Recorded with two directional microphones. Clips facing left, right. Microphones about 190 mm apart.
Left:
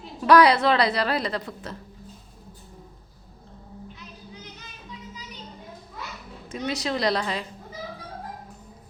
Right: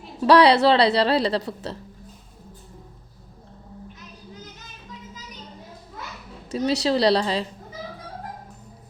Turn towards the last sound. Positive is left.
turn(degrees=-30)  # may be behind; listen again after turning